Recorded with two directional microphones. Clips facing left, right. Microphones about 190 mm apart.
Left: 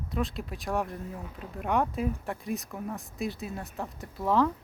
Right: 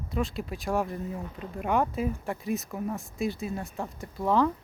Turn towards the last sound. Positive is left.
turn(degrees=0)  # may be behind; listen again after turning